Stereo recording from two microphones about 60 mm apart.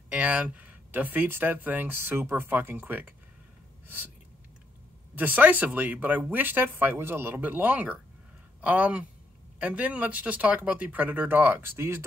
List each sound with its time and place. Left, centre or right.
0.1 s speech: right
3.8 s a sound: right
5.1 s speech: right